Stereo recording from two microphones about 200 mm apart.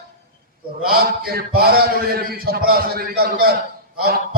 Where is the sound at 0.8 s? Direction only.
50° right (ahead or behind).